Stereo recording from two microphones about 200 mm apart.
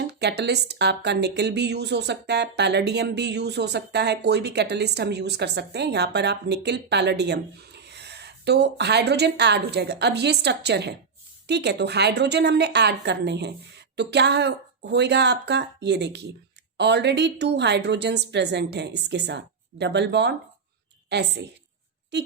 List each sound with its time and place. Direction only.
0.0 s speech: 55° right (ahead or behind)